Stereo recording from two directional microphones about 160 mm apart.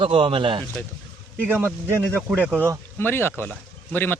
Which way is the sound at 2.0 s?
10° left (ahead or behind).